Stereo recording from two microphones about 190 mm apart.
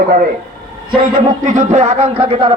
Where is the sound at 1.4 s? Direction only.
40° right (ahead or behind).